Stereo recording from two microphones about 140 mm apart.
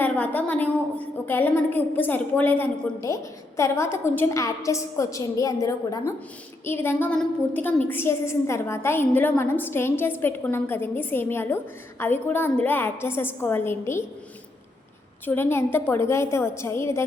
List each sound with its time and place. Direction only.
0.0 s a woman's voice: 10° left (ahead or behind)
15.3 s a woman's voice: 15° left (ahead or behind)